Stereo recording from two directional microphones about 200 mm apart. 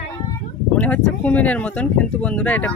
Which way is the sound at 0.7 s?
5° left (ahead or behind).